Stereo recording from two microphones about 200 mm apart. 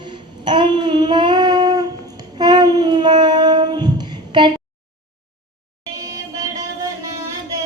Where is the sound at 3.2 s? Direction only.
20° right (ahead or behind).